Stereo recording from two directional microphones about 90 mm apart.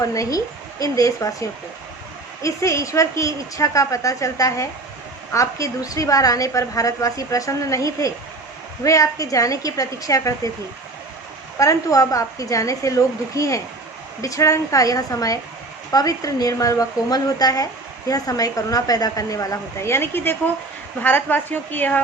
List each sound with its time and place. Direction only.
0.0 s a woman's voice: 40° left (ahead or behind)
11.5 s a woman's voice: 35° left (ahead or behind); by 22.0 s 20° left (ahead or behind)